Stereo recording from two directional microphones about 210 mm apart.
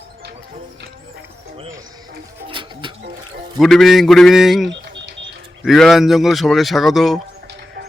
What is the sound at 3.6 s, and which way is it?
Speech, centre (ahead or behind).